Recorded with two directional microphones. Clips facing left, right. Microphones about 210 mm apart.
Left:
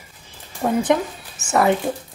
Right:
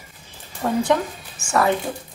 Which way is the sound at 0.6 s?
15° left (ahead or behind).